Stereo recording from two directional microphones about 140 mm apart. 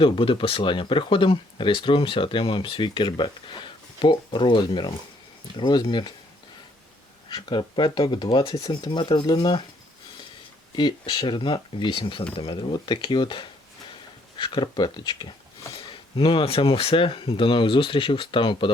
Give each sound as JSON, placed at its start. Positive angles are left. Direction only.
{"t": 0.0, "sound": "speech", "side_deg": 40}
{"t": 7.3, "sound": "speech", "side_deg": 35}
{"t": 10.8, "sound": "speech", "side_deg": 35}